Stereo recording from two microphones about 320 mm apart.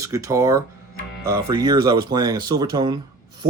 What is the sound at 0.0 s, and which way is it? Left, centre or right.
Speech, centre.